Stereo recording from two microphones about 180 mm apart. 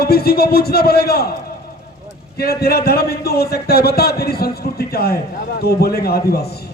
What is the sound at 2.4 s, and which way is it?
Speech, 60° left (ahead or behind).